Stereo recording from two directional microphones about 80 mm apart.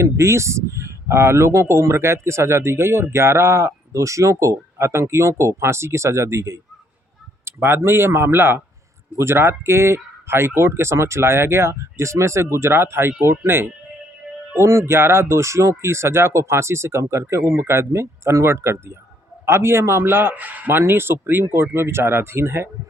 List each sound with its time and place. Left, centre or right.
0.0 s a man's voice: right